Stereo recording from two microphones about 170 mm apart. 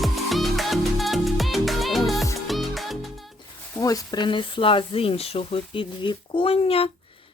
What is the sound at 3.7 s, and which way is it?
Speech, 20° left (ahead or behind).